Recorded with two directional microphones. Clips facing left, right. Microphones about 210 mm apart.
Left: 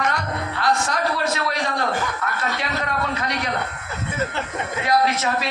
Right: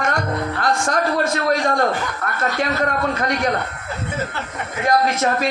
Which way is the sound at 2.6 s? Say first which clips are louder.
Right 5 dB; 50° right (ahead or behind).